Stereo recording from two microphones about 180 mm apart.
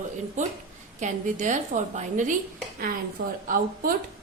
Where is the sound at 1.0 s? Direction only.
45° right (ahead or behind).